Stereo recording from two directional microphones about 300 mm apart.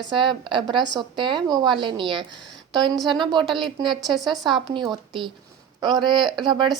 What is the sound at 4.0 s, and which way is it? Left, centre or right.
Speech, centre.